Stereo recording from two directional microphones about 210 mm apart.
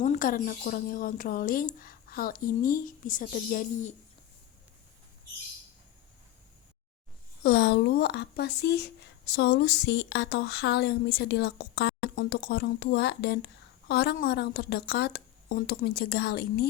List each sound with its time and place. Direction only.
0.0 s speech: 35° left (ahead or behind)
7.4 s speech: 55° left (ahead or behind)